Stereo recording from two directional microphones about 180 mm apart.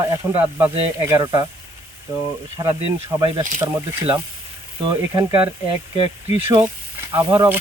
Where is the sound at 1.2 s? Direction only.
25° right (ahead or behind).